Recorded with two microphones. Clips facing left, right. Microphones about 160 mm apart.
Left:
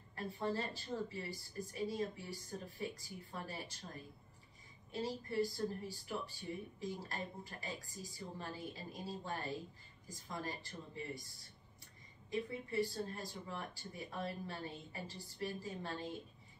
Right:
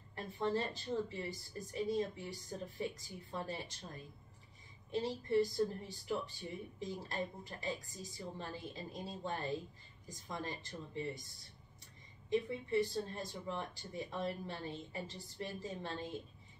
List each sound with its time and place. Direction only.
0.1 s speech: 20° right (ahead or behind)
4.9 s speech: 20° right (ahead or behind)
12.3 s speech: 20° right (ahead or behind)